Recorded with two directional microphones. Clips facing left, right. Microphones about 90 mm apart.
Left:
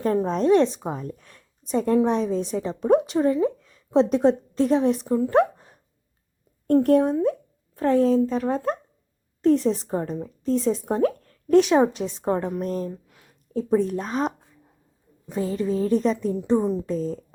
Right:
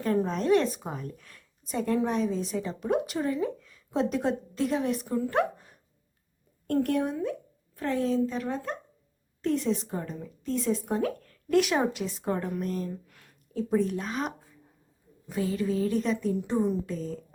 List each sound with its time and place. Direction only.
0.3 s a woman's voice: 30° left (ahead or behind)
12.9 s a sound: 15° left (ahead or behind)
13.5 s a woman's voice: 30° left (ahead or behind)